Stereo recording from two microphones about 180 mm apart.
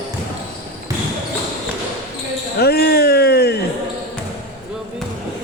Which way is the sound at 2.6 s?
60° left (ahead or behind).